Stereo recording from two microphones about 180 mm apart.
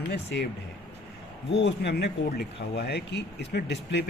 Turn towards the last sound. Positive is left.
turn(degrees=70)  # may be behind; listen again after turning